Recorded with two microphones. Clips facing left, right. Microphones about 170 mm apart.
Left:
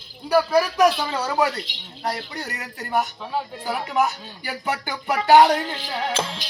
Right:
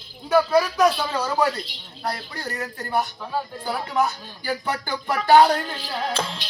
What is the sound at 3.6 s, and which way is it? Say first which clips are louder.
Music: left 1 dB; 10° left (ahead or behind).